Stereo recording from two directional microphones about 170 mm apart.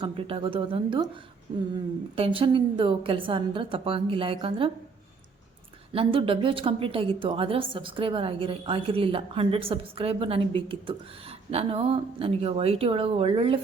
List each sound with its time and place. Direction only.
0.0 s a woman's voice: 30° right (ahead or behind)
2.1 s a woman's voice: 35° right (ahead or behind)
5.9 s a woman's voice: 30° right (ahead or behind)